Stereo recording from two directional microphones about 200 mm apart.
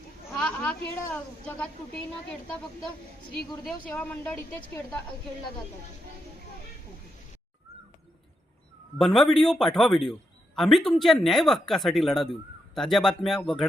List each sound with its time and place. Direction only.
0.4 s a man's voice: 5° left (ahead or behind)
3.3 s a woman's voice: centre (ahead or behind)
9.0 s a man's voice: centre (ahead or behind)